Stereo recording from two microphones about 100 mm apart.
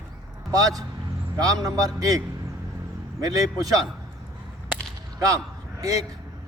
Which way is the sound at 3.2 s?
40° right (ahead or behind).